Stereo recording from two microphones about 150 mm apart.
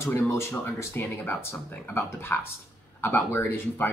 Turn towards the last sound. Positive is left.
turn(degrees=15)  # may be behind; listen again after turning